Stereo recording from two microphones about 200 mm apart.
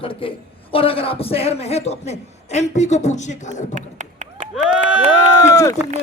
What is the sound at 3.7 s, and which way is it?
Chop, 35° right (ahead or behind).